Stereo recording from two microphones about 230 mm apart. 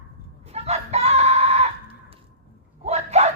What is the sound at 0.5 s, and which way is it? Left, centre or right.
Chicken, right.